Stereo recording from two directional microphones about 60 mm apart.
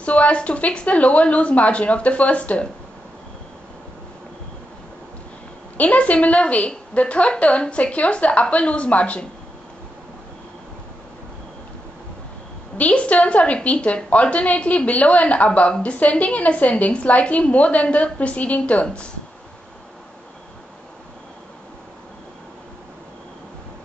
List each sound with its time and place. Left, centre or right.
0.0 s a woman's voice: left
5.8 s a woman's voice: left
12.7 s a woman's voice: left